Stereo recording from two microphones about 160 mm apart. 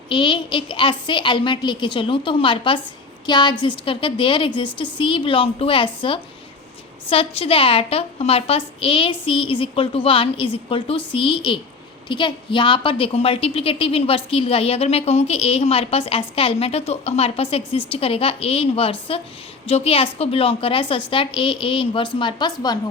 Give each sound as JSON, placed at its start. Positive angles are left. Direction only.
{"t": 0.1, "sound": "a woman's voice", "side_deg": 30}